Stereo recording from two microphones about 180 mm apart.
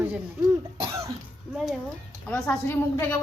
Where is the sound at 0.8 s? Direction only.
15° right (ahead or behind).